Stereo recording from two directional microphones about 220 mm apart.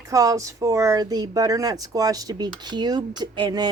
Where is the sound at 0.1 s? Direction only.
15° right (ahead or behind).